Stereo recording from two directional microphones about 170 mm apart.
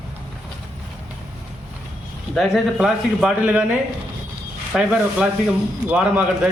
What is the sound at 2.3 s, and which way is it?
Speech, centre (ahead or behind).